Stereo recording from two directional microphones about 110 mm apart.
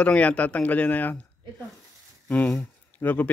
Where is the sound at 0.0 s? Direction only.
10° left (ahead or behind).